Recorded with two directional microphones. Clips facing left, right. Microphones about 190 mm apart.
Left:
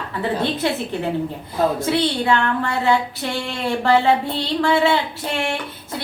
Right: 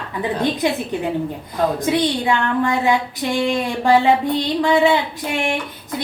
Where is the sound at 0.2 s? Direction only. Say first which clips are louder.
Right 2 dB; 15° right (ahead or behind).